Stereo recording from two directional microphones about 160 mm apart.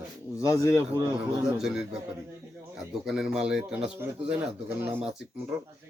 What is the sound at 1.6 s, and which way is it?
Speech, 5° right (ahead or behind).